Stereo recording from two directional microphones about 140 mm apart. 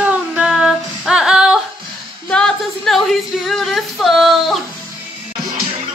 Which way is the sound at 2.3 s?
5° left (ahead or behind).